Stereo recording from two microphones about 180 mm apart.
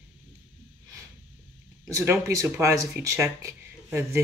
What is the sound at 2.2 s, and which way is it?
Speech, 15° right (ahead or behind).